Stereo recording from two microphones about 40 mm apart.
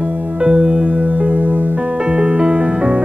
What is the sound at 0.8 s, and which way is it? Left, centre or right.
Music, right.